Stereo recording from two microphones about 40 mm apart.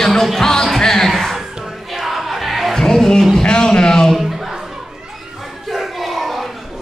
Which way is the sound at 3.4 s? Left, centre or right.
Centre.